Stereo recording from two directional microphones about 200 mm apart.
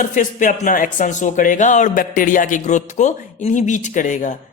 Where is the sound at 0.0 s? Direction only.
40° left (ahead or behind).